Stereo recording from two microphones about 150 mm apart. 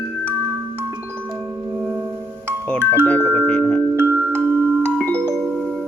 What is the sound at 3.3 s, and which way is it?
Music, 10° left (ahead or behind).